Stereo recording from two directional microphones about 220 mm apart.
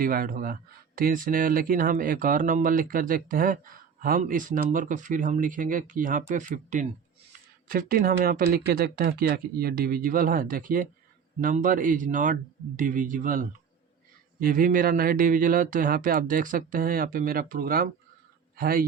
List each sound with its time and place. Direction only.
0.0 s speech: 40° right (ahead or behind)